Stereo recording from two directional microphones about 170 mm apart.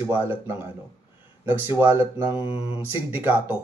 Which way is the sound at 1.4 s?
10° right (ahead or behind).